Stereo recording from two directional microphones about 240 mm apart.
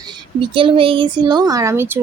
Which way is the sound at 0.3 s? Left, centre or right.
Right.